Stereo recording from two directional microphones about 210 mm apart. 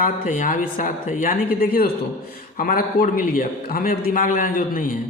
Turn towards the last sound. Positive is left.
turn(degrees=40)  # may be behind; listen again after turning